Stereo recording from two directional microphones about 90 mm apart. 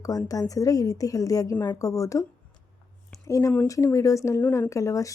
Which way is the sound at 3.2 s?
35° left (ahead or behind).